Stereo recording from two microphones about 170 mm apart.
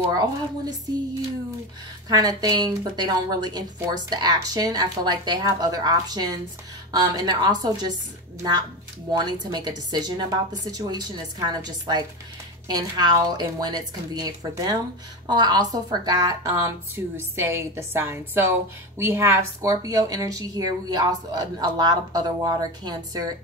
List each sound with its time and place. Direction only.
0.0 s a woman's voice: 20° right (ahead or behind)
2.0 s a woman's voice: 25° right (ahead or behind)